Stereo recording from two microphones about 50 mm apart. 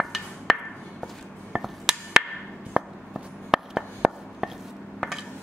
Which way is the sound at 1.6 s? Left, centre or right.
Centre.